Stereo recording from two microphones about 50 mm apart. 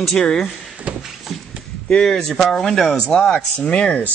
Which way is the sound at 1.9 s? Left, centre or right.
Centre.